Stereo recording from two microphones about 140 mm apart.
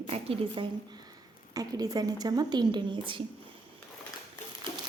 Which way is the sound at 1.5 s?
25° right (ahead or behind).